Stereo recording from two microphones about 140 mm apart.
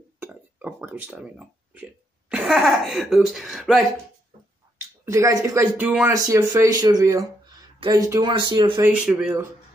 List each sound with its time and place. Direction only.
0.2 s speech: 10° right (ahead or behind)
4.6 s a sound: 25° right (ahead or behind)
5.0 s speech: 20° right (ahead or behind)
5.8 s speech: 10° right (ahead or behind)
6.1 s speech: 25° right (ahead or behind)
8.9 s speech: 5° right (ahead or behind)